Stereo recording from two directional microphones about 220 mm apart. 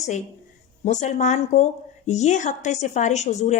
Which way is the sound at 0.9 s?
30° left (ahead or behind).